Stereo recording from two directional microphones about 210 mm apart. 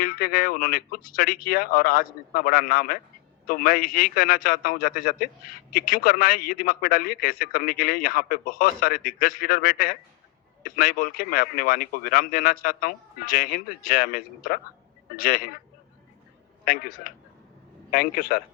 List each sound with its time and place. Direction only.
0.0 s a man's voice: 45° left (ahead or behind)
16.6 s a man's voice: 45° left (ahead or behind)